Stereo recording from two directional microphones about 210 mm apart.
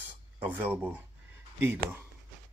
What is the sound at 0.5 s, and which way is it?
Speech, 10° right (ahead or behind).